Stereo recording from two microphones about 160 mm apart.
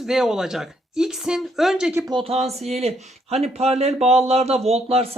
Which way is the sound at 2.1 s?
35° right (ahead or behind).